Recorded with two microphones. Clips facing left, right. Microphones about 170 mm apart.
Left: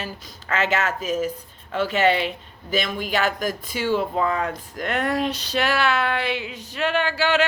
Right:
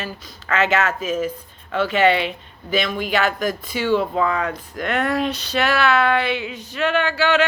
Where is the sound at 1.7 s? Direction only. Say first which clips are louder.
Right 3 dB; 45° left (ahead or behind).